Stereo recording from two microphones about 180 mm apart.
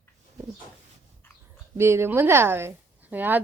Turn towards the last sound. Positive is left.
turn(degrees=-10)  # may be behind; listen again after turning